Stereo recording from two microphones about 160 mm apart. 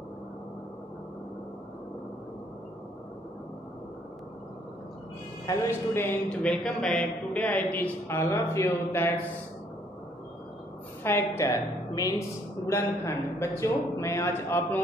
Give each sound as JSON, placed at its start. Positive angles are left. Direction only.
{"t": 5.7, "sound": "a woman's voice", "side_deg": 15}
{"t": 11.1, "sound": "a woman's voice", "side_deg": 15}